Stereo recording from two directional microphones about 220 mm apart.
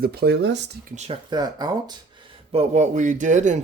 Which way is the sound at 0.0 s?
45° right (ahead or behind).